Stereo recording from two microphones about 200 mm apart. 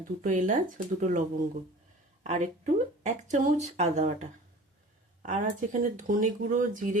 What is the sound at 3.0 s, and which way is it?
Speech, 35° right (ahead or behind).